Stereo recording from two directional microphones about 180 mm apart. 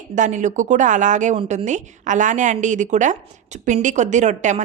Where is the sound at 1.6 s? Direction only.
45° right (ahead or behind).